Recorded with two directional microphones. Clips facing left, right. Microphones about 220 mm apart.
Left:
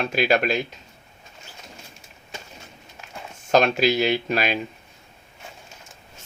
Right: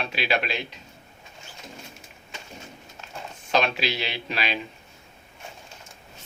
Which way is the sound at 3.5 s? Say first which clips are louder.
Left 6 dB; 45° left (ahead or behind).